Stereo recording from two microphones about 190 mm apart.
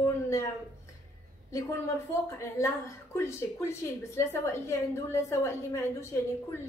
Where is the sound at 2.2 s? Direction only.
15° left (ahead or behind).